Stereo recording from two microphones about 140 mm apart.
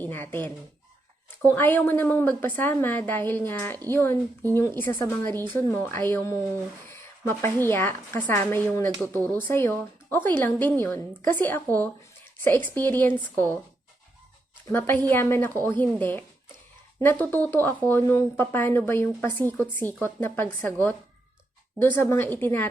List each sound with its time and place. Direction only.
0.0 s speech: 15° left (ahead or behind)
1.5 s a woman's voice: 15° left (ahead or behind)
14.7 s a woman's voice: 10° left (ahead or behind)
21.8 s a woman's voice: 15° left (ahead or behind)